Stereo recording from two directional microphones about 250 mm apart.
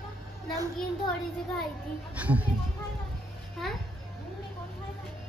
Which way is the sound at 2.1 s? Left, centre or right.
Centre.